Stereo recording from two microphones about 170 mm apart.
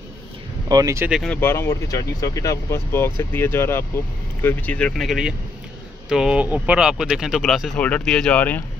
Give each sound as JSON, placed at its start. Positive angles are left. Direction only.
{"t": 0.7, "sound": "speech", "side_deg": -20}
{"t": 1.1, "sound": "speech", "side_deg": 5}
{"t": 1.4, "sound": "speech", "side_deg": 15}